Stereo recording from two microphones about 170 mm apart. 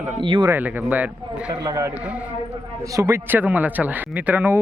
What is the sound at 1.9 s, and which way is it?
Speech, 5° right (ahead or behind).